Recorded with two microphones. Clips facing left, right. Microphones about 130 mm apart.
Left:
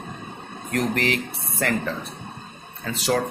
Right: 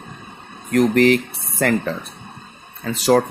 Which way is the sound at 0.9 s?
45° right (ahead or behind).